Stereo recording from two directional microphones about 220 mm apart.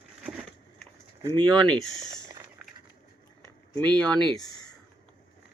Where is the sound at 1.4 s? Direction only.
5° left (ahead or behind).